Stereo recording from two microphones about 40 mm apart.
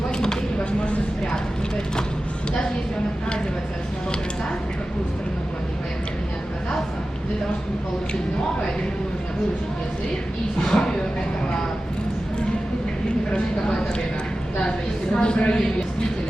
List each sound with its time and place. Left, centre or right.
0.8 s a sound: left
10.6 s speech: centre
15.1 s speech: left